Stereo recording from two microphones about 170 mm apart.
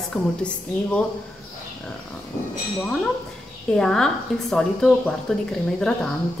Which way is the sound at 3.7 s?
5° left (ahead or behind).